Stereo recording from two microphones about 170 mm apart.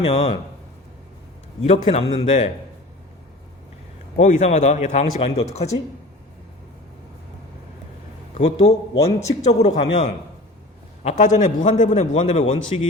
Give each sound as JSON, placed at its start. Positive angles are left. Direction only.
{"t": 0.0, "sound": "speech", "side_deg": 35}
{"t": 1.6, "sound": "speech", "side_deg": 40}
{"t": 4.2, "sound": "speech", "side_deg": 40}
{"t": 8.4, "sound": "speech", "side_deg": 35}
{"t": 11.0, "sound": "a man's voice", "side_deg": 45}